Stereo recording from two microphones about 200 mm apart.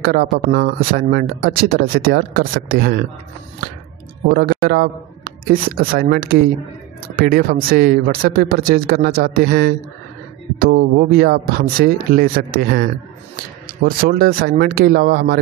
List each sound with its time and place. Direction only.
0.0 s speech: 50° right (ahead or behind)
4.3 s a man's voice: 50° right (ahead or behind)